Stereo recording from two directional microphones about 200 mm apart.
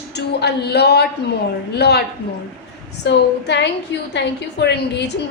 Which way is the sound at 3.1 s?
60° left (ahead or behind).